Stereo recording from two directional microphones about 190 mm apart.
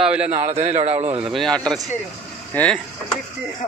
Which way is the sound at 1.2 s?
Centre (ahead or behind).